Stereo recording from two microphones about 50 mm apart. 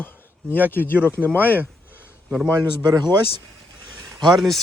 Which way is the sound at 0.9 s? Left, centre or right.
Right.